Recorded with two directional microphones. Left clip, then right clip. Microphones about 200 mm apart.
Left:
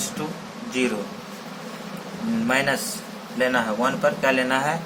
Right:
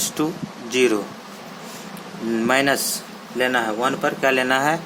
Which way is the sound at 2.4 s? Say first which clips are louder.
Right 3 dB; 55° right (ahead or behind).